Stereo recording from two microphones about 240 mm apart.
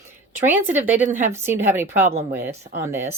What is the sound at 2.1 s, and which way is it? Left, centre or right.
Speech, right.